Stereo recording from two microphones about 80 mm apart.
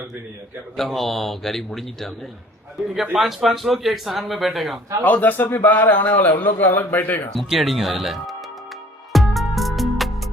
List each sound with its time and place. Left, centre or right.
0.8 s a man's voice: centre
3.2 s a man's voice: centre
5.0 s a man's voice: left
7.3 s a man's voice: centre
9.1 s music: centre